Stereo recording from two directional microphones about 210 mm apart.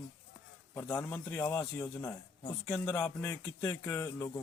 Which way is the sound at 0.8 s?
10° left (ahead or behind).